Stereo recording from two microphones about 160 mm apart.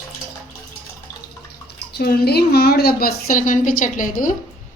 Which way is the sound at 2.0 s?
85° left.